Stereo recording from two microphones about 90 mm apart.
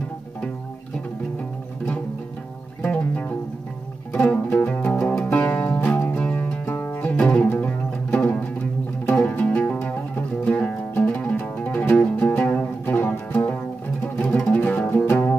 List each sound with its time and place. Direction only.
2.8 s music: 15° left (ahead or behind)